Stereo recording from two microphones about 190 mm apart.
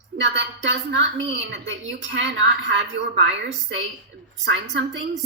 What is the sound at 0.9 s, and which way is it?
A woman's voice, 70° right (ahead or behind).